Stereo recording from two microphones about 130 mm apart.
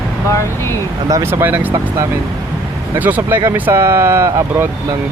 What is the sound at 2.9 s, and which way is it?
Speech, 15° right (ahead or behind).